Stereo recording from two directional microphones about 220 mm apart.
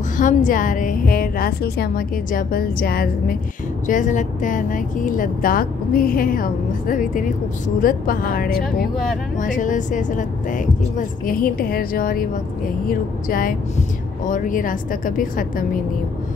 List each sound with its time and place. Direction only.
0.2 s speech: 35° left (ahead or behind)